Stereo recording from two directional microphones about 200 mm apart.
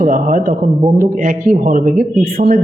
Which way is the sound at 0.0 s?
40° right (ahead or behind).